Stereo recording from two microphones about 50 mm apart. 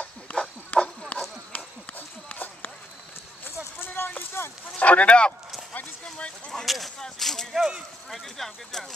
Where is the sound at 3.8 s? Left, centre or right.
Left.